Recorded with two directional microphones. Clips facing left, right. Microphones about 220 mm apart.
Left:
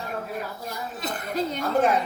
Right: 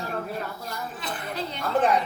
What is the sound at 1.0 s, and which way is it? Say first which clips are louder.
Speech: left 7 dB; 45° left (ahead or behind).